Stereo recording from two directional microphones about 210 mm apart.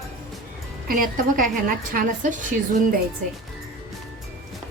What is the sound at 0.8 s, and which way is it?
A woman's voice, 40° right (ahead or behind).